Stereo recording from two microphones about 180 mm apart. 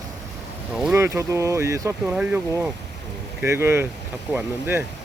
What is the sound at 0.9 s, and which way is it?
Speech, 15° right (ahead or behind).